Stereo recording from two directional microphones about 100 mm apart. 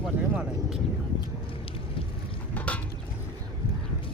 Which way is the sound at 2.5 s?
15° left (ahead or behind).